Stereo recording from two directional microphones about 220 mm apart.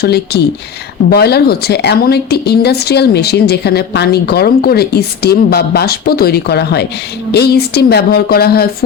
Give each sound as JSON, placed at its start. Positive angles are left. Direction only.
{"t": 0.0, "sound": "speech", "side_deg": 45}